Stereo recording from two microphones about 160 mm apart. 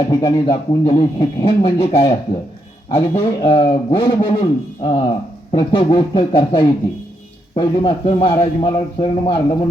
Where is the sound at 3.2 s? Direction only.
35° left (ahead or behind).